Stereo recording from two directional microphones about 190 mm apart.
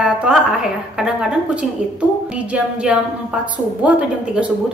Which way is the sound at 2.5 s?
5° right (ahead or behind).